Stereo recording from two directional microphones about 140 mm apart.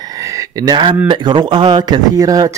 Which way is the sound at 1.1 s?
35° right (ahead or behind).